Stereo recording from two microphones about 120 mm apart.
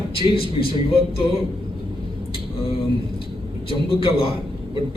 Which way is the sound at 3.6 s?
50° left (ahead or behind).